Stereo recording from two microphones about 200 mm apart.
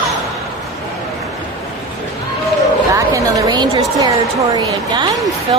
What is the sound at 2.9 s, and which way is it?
A woman's voice, 15° right (ahead or behind).